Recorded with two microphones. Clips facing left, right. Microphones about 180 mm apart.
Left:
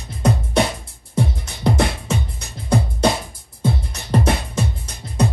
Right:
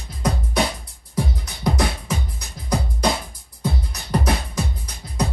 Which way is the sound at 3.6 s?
25° left (ahead or behind).